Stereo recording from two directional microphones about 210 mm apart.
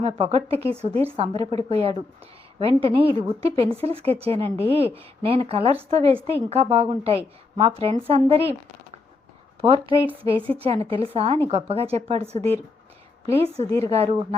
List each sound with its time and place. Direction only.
0.0 s a woman's voice: 30° right (ahead or behind)
9.6 s a woman's voice: 25° right (ahead or behind)
13.7 s a woman's voice: 15° left (ahead or behind)
13.9 s a woman's voice: 25° right (ahead or behind)